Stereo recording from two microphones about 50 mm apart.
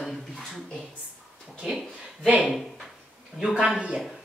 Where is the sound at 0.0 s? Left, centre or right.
Centre.